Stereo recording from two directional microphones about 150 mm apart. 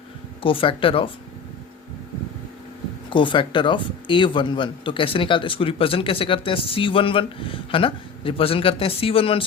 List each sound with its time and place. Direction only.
0.4 s speech: 35° left (ahead or behind)
3.1 s speech: 35° left (ahead or behind)